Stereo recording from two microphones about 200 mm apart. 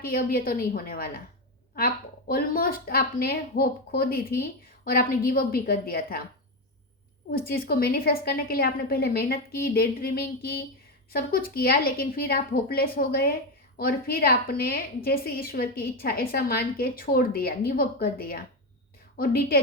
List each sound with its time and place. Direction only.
0.0 s a woman's voice: 50° left (ahead or behind)
7.3 s a woman's voice: 50° left (ahead or behind)